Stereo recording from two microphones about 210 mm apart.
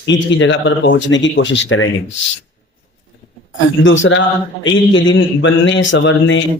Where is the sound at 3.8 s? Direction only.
65° left (ahead or behind).